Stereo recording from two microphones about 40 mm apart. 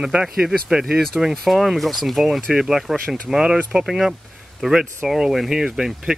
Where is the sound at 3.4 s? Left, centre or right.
Right.